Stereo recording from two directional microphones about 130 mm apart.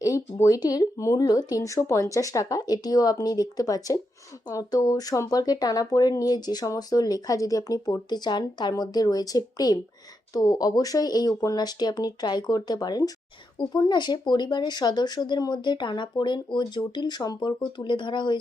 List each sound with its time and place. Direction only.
0.0 s speech: 25° left (ahead or behind)